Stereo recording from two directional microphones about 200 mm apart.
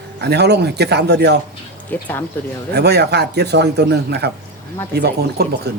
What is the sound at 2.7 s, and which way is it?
Speech, 55° right (ahead or behind).